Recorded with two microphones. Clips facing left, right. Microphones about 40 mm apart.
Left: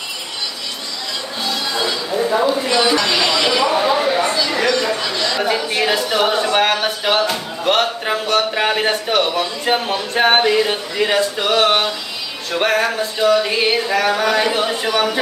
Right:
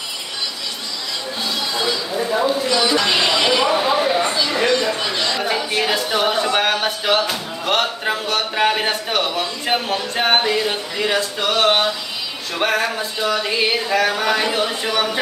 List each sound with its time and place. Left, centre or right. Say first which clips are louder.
1.8 s speech: left 3 dB; centre
3.0 s speech: left 1 dB; centre
3.9 s a sound: left 1 dB; centre
4.2 s speech: left 1 dB; centre
5.4 s speech: left 2 dB; centre
10.1 s speech: left 4 dB; centre